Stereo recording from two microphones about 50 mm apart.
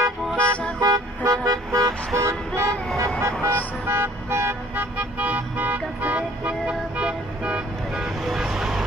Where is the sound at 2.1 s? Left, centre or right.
Right.